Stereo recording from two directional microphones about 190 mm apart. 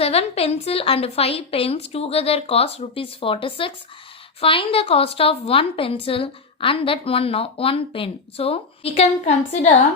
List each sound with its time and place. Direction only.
0.0 s a woman's voice: 30° left (ahead or behind)